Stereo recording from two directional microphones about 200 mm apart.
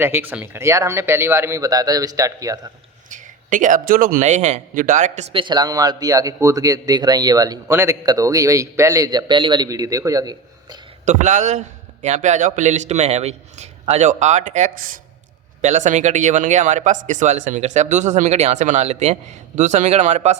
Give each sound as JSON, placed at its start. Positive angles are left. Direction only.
{"t": 0.0, "sound": "speech", "side_deg": -10}
{"t": 3.1, "sound": "a man's voice", "side_deg": -40}
{"t": 11.0, "sound": "speech", "side_deg": -35}